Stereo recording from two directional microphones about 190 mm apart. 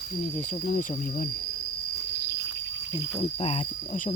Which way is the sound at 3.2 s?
30° left (ahead or behind).